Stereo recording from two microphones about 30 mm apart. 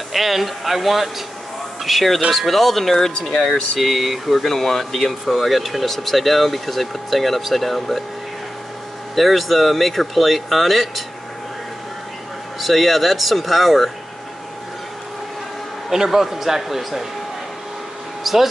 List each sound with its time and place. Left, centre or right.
0.1 s speech: centre
3.0 s speech: left
3.8 s speech: centre
4.5 s speech: centre
9.1 s speech: centre
12.5 s speech: centre
16.1 s a man's voice: centre
18.2 s speech: centre